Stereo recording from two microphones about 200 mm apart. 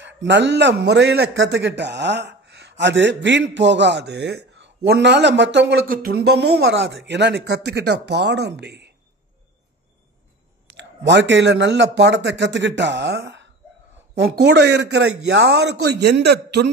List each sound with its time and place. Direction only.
0.3 s a man's voice: 60° right (ahead or behind)
10.8 s a man's voice: 60° right (ahead or behind)